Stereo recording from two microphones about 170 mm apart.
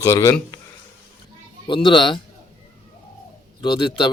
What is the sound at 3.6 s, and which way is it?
Speech, 25° left (ahead or behind).